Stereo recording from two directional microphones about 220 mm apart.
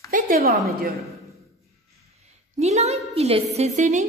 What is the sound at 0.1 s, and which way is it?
Speech, 40° right (ahead or behind).